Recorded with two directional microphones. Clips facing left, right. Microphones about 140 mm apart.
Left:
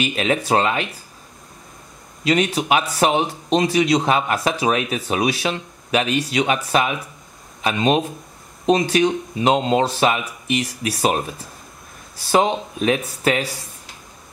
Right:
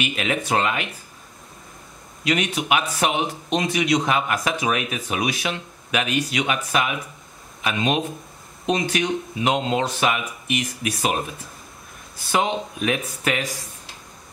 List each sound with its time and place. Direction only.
0.0 s speech: 35° left (ahead or behind)
2.2 s speech: 35° left (ahead or behind)
12.3 s speech: 35° left (ahead or behind)